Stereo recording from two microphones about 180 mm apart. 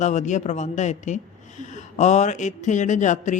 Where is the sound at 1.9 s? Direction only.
40° left (ahead or behind).